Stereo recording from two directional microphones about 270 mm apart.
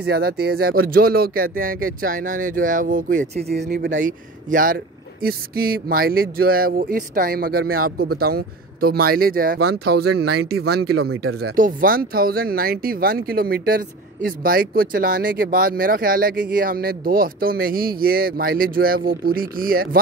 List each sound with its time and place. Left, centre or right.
0.0 s speech: right
10.1 s speech: right
10.5 s speech: right
11.0 s speech: right
11.5 s speech: right